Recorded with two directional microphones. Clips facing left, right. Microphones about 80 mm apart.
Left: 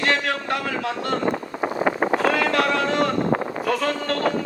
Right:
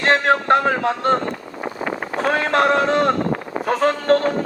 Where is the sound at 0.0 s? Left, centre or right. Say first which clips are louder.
Right 6 dB; right.